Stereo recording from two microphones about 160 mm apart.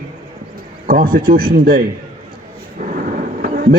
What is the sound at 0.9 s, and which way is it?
Speech, 70° right (ahead or behind).